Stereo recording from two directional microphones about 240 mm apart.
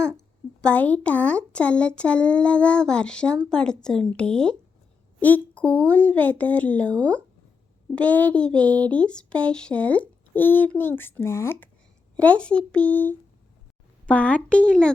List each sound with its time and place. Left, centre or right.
0.6 s speech: centre